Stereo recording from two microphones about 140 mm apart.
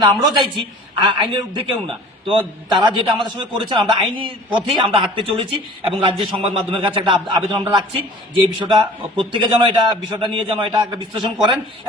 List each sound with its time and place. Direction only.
0.0 s a man's voice: 35° right (ahead or behind)